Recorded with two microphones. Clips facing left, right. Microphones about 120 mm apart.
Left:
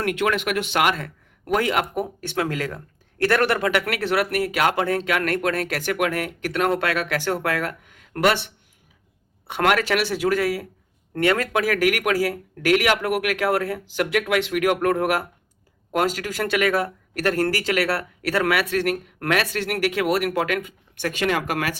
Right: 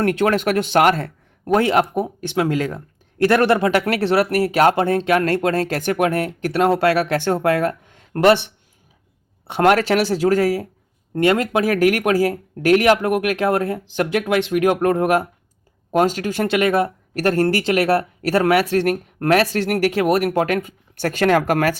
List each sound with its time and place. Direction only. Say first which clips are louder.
0.0 s speech: right 5 dB; 35° right (ahead or behind)
9.5 s speech: right 5 dB; 30° right (ahead or behind)